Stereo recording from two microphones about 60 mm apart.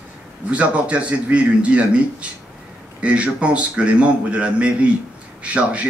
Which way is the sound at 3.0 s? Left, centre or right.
Centre.